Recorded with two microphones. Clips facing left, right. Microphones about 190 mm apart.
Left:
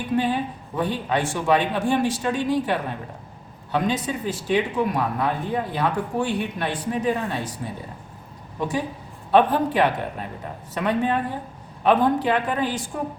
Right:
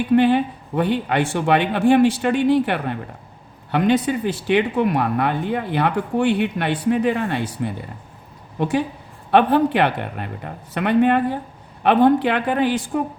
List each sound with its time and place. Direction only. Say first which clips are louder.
0.2 s a woman's voice: right 7 dB; 70° right (ahead or behind)